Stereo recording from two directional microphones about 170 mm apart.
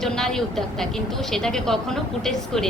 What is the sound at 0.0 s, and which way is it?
A woman's voice, centre (ahead or behind).